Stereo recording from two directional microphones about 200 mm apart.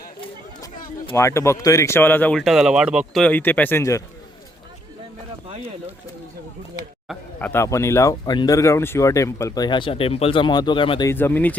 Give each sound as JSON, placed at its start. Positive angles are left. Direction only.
{"t": 0.6, "sound": "speech", "side_deg": 15}
{"t": 3.2, "sound": "speech", "side_deg": 10}
{"t": 7.1, "sound": "speech", "side_deg": 10}
{"t": 11.1, "sound": "speech", "side_deg": 10}